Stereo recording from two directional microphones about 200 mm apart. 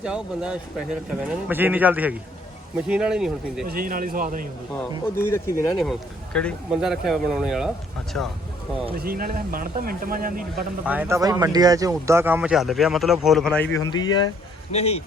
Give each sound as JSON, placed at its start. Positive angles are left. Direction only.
{"t": 0.0, "sound": "speech", "side_deg": -5}
{"t": 3.7, "sound": "speech", "side_deg": -45}
{"t": 4.7, "sound": "speech", "side_deg": 10}
{"t": 5.7, "sound": "speech", "side_deg": 0}
{"t": 9.0, "sound": "speech", "side_deg": -50}
{"t": 10.8, "sound": "speech", "side_deg": -10}
{"t": 14.7, "sound": "speech", "side_deg": 30}